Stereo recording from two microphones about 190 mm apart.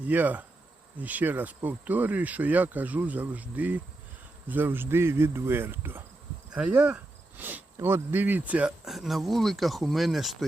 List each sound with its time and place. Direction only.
0.0 s speech: 10° right (ahead or behind)